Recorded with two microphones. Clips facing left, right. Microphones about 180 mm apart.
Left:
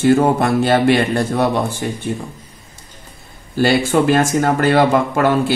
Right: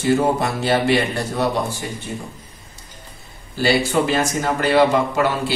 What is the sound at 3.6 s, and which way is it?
A man's voice, 50° left (ahead or behind).